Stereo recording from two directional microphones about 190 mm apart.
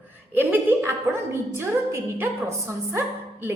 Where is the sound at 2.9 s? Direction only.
10° right (ahead or behind).